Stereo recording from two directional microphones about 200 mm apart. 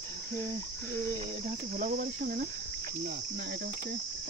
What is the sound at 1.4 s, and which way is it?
Cricket, 40° right (ahead or behind).